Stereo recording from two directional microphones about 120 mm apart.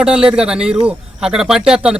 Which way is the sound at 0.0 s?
5° right (ahead or behind).